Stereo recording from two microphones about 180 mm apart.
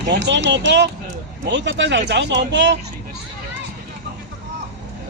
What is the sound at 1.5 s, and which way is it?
Speech, 90° right.